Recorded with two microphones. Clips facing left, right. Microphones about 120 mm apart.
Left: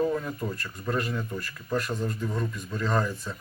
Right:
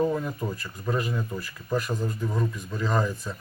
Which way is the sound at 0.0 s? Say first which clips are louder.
Right 1 dB; 10° right (ahead or behind).